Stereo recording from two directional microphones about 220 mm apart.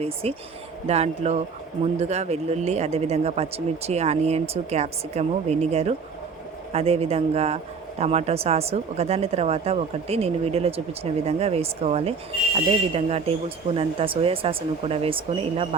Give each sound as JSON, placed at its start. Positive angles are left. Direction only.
{"t": 0.0, "sound": "speech", "side_deg": -25}